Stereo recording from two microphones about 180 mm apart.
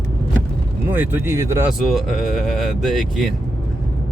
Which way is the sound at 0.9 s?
10° right (ahead or behind).